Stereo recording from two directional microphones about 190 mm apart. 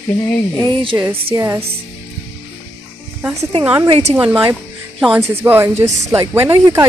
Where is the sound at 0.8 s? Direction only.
20° right (ahead or behind).